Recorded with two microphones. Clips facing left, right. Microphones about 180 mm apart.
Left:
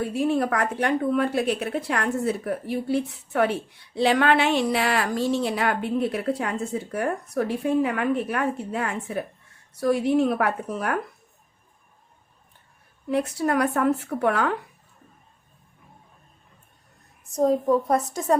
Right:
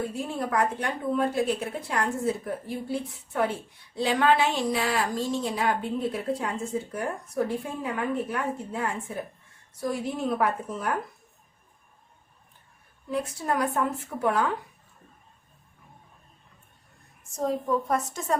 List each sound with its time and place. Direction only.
0.1 s a woman's voice: 70° left (ahead or behind)
13.1 s a woman's voice: 70° left (ahead or behind)
17.3 s a woman's voice: 35° left (ahead or behind)